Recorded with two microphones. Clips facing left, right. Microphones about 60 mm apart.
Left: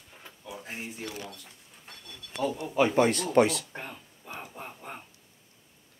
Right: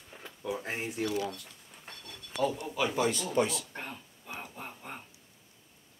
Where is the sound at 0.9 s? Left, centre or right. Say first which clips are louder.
Right 7 dB; right.